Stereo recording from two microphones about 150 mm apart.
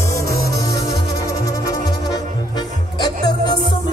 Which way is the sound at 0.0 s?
20° left (ahead or behind).